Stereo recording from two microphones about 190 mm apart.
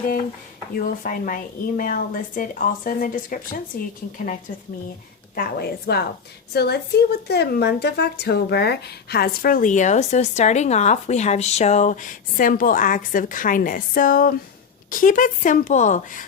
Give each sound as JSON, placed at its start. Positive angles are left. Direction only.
{"t": 0.8, "sound": "a woman's voice", "side_deg": 45}
{"t": 5.3, "sound": "a woman's voice", "side_deg": 50}